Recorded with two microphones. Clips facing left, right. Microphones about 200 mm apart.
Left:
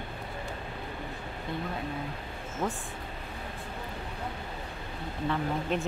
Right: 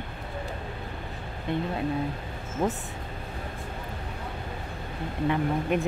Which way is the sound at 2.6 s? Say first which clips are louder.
Right 5 dB; 20° right (ahead or behind).